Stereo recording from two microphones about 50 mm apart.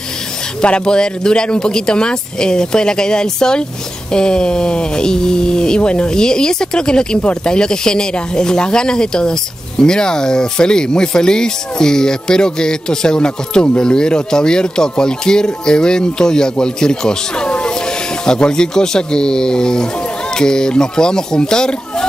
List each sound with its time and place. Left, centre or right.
0.6 s speech: centre